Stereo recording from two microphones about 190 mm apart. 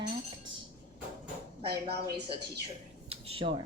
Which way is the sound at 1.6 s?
60° right (ahead or behind).